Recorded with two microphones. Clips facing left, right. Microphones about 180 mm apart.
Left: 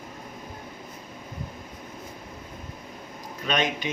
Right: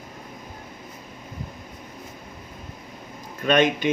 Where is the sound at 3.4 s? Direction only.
55° right (ahead or behind).